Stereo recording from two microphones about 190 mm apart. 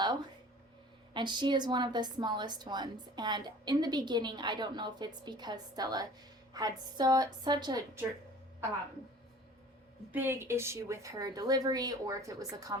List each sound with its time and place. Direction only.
1.1 s a woman's voice: 25° right (ahead or behind)
10.1 s a woman's voice: 10° right (ahead or behind)